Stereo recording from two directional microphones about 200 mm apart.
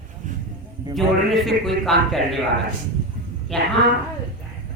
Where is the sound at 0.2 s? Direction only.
40° right (ahead or behind).